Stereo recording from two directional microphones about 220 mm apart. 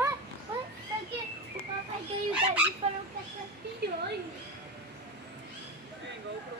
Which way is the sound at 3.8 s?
50° right (ahead or behind).